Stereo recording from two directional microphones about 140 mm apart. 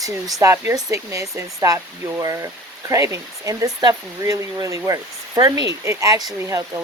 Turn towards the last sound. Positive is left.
turn(degrees=-20)  # may be behind; listen again after turning